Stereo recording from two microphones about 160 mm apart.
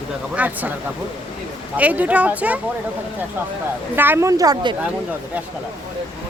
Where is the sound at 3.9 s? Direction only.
10° right (ahead or behind).